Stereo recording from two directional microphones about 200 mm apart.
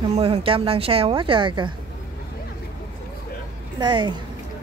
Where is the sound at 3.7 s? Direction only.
20° right (ahead or behind).